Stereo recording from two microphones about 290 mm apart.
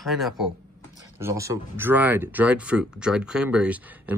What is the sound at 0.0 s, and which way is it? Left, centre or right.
Speech, centre.